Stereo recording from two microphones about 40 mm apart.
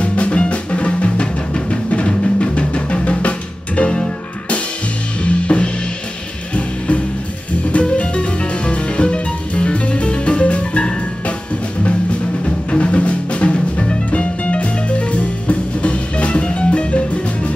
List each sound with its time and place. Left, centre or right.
0.0 s music: left
5.2 s drum kit: left
7.7 s music: left
12.4 s music: left